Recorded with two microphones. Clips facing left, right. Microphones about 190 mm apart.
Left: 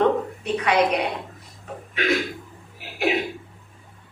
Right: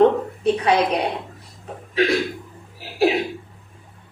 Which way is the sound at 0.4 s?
30° right (ahead or behind).